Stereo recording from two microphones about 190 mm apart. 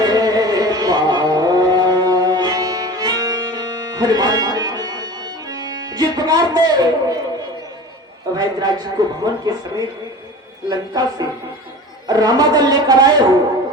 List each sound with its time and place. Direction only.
0.0 s carnatic music: 20° right (ahead or behind)
8.4 s speech: 20° right (ahead or behind)